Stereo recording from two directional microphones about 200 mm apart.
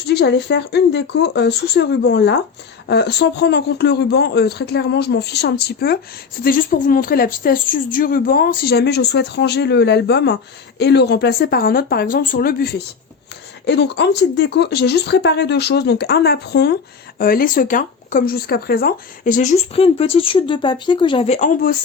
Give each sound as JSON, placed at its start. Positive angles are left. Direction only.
{"t": 0.0, "sound": "a woman's voice", "side_deg": 55}